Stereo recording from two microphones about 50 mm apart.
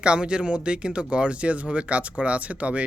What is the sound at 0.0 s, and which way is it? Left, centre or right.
Speech, centre.